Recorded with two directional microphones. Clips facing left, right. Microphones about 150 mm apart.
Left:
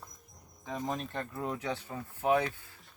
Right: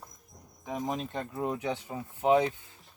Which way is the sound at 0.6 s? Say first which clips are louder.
Right 2 dB; 10° right (ahead or behind).